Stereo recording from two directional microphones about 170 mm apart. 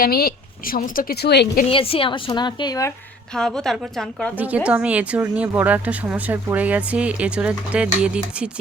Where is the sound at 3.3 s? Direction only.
5° left (ahead or behind).